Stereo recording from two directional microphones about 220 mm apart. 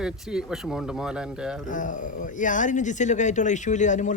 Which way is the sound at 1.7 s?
35° left (ahead or behind).